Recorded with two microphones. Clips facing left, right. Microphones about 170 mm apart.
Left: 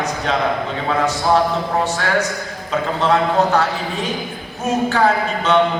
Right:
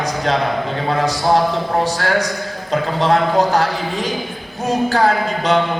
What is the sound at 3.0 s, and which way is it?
Speech, 35° right (ahead or behind).